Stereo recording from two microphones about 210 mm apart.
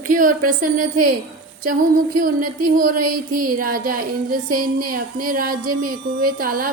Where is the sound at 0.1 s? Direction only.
40° right (ahead or behind).